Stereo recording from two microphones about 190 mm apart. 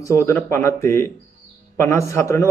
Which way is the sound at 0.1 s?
15° left (ahead or behind).